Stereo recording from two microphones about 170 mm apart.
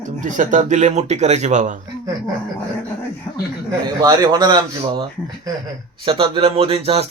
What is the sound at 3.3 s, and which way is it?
Speech, 20° left (ahead or behind).